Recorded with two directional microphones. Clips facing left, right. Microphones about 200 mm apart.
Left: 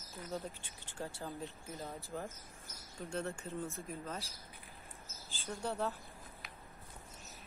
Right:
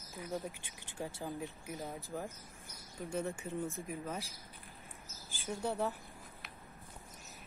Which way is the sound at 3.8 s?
15° right (ahead or behind).